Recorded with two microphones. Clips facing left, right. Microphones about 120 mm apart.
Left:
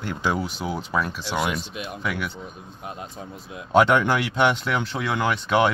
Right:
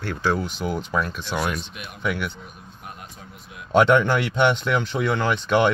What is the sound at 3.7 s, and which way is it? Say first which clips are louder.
Speech: right 1 dB; 5° left (ahead or behind).